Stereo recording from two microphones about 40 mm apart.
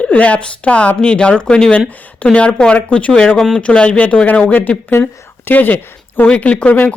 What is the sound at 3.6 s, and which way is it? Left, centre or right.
Speech, left.